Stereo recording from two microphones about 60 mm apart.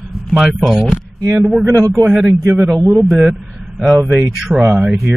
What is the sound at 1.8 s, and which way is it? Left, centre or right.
Speech, right.